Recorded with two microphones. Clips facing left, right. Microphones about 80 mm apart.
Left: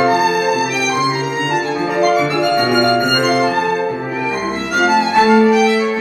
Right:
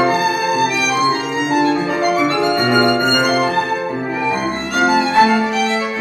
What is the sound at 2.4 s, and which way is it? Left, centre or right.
Music, right.